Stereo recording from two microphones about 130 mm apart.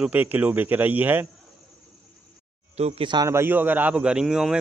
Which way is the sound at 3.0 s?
35° right (ahead or behind).